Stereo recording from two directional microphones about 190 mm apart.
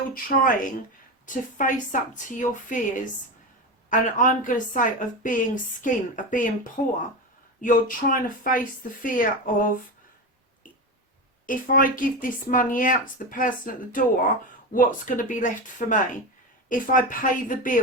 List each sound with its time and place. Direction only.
0.1 s speech: 45° left (ahead or behind)
11.4 s speech: 45° left (ahead or behind)